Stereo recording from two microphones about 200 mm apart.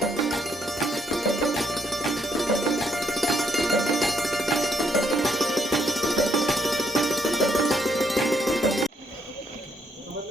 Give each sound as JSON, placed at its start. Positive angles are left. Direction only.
{"t": 0.0, "sound": "music", "side_deg": 0}